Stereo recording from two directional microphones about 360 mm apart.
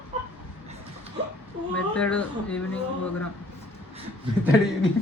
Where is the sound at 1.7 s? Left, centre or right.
Centre.